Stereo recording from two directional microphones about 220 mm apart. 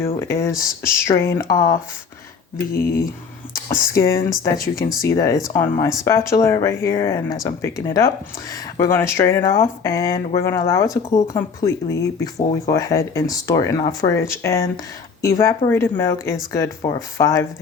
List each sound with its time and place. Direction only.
0.2 s speech: 15° left (ahead or behind)